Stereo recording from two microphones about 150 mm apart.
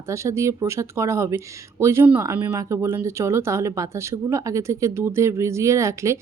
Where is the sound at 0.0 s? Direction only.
20° right (ahead or behind).